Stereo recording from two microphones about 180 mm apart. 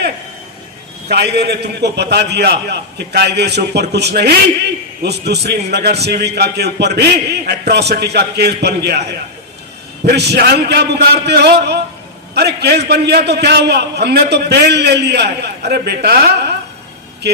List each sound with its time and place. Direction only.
1.1 s a man's voice: 65° right (ahead or behind)